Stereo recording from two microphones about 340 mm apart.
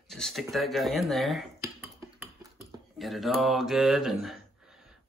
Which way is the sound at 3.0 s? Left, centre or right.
Centre.